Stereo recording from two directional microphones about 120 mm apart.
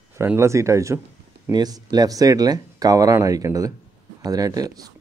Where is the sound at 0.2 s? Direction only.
20° right (ahead or behind).